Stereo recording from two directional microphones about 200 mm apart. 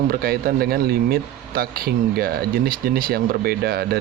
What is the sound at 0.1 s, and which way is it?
Speech, 50° right (ahead or behind).